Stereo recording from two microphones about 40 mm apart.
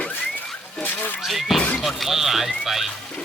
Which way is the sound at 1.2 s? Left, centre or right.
Centre.